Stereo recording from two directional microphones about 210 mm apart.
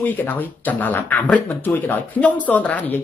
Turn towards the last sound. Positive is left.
turn(degrees=10)  # may be behind; listen again after turning